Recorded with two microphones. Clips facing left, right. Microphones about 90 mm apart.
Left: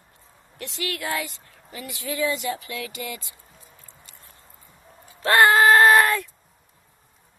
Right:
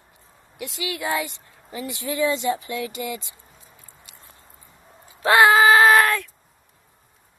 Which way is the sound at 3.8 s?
15° right (ahead or behind).